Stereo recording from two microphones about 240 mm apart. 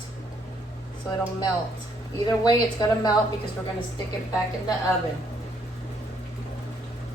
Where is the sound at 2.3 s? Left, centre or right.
Centre.